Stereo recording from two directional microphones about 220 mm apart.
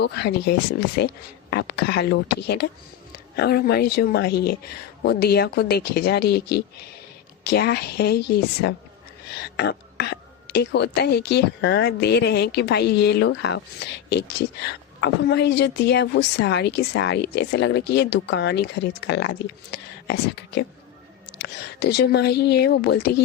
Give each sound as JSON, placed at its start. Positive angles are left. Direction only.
{"t": 0.0, "sound": "a woman's voice", "side_deg": 50}